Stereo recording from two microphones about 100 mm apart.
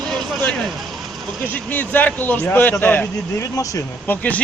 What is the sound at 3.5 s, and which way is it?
Speech, 35° left (ahead or behind).